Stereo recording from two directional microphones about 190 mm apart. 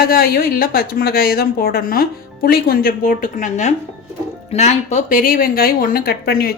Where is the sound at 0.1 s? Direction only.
50° left (ahead or behind).